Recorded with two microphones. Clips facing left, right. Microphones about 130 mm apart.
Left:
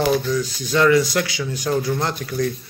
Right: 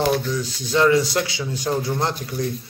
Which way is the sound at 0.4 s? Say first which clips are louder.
Left 1 dB; 25° right (ahead or behind).